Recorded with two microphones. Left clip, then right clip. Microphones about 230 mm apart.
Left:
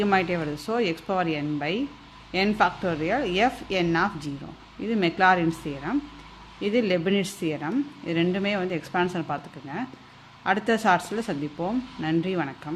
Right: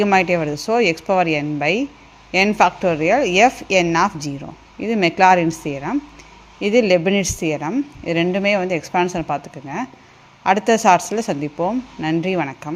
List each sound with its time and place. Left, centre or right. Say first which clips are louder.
0.0 s a woman's voice: right 8 dB; right